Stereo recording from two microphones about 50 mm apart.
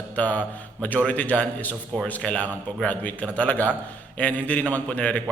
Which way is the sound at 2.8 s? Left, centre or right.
Left.